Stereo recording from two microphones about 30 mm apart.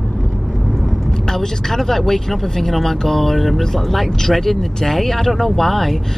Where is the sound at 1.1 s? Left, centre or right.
Centre.